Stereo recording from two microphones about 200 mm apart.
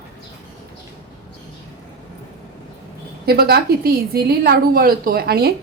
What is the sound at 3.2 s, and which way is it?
A woman's voice, 50° right (ahead or behind).